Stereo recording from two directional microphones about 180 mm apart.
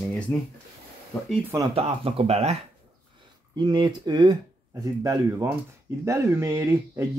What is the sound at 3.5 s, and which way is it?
Speech, 25° right (ahead or behind).